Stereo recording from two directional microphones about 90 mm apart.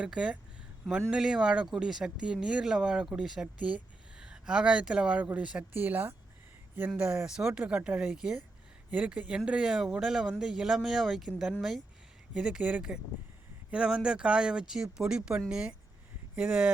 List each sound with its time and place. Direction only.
0.0 s speech: 10° right (ahead or behind)
5.7 s speech: 25° right (ahead or behind); by 11.3 s centre (ahead or behind)
12.3 s speech: 10° right (ahead or behind)